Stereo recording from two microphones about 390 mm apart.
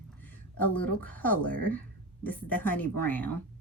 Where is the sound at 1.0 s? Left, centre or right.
Centre.